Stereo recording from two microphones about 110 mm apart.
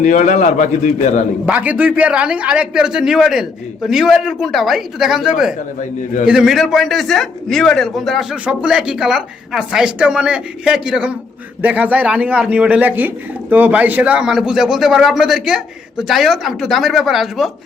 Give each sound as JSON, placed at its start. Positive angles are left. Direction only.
{"t": 0.0, "sound": "a man's voice", "side_deg": 90}
{"t": 1.5, "sound": "a man's voice", "side_deg": -10}